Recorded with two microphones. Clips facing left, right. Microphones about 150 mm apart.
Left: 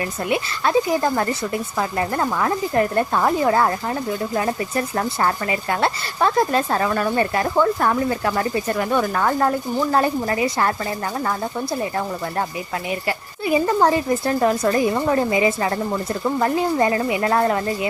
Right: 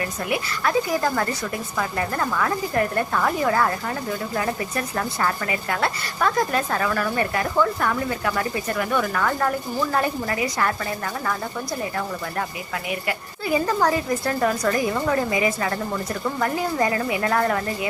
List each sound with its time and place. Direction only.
0.3 s a woman's voice: 25° left (ahead or behind)
12.9 s a woman's voice: 25° left (ahead or behind)